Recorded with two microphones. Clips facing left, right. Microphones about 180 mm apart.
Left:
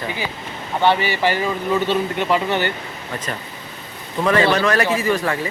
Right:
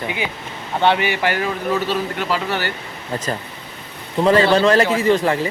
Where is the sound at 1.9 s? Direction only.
5° right (ahead or behind).